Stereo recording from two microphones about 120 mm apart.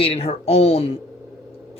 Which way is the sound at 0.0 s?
55° left (ahead or behind).